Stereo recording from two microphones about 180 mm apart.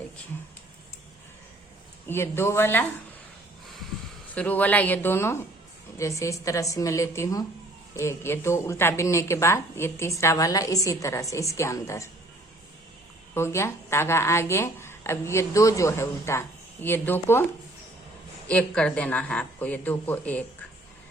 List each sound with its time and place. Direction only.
2.0 s speech: 15° left (ahead or behind)
4.4 s speech: 10° left (ahead or behind)
13.3 s speech: 15° left (ahead or behind)
18.4 s speech: 5° left (ahead or behind)